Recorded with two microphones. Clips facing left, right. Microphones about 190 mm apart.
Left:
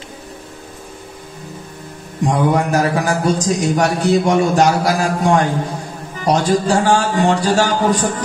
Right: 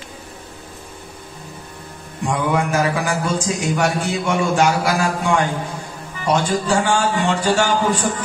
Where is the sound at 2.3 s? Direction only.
40° left (ahead or behind).